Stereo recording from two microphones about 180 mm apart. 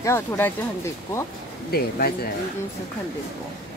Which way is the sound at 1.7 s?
60° left (ahead or behind).